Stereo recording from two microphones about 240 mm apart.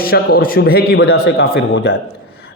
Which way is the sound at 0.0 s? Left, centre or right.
Left.